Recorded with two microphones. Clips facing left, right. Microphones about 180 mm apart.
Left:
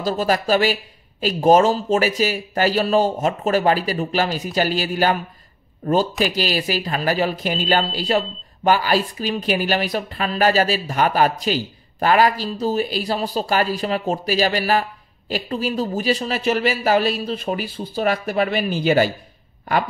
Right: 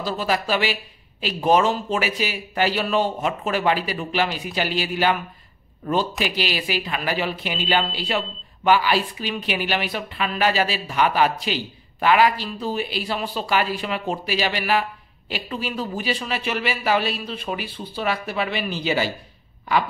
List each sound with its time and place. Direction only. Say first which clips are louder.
0.0 s speech: left 4 dB; 45° left (ahead or behind)
6.2 s speech: left 4 dB; 40° left (ahead or behind)